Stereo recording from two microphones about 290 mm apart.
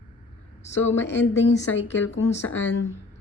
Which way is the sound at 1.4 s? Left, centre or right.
Left.